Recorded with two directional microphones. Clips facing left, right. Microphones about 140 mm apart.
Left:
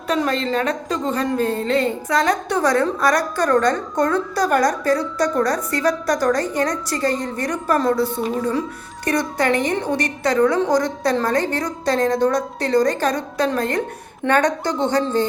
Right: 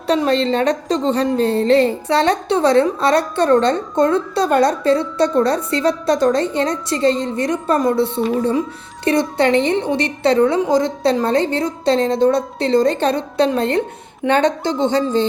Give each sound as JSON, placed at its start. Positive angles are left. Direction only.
{"t": 0.1, "sound": "a woman's voice", "side_deg": -30}